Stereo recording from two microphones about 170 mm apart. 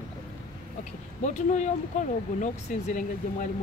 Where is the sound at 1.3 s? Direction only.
45° left (ahead or behind).